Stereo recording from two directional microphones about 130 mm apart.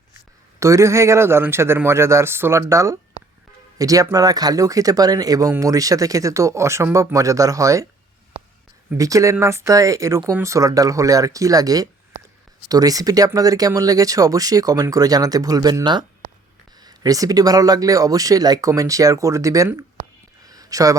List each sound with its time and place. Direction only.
0.6 s speech: 25° right (ahead or behind)
9.0 s speech: 25° right (ahead or behind)
20.5 s a sound: 25° right (ahead or behind)